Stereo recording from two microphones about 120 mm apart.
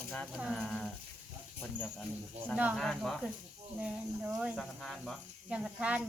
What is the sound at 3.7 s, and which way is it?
Speech, 10° right (ahead or behind).